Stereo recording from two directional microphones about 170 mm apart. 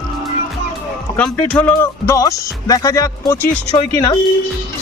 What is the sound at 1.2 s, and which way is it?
Speech, 5° left (ahead or behind).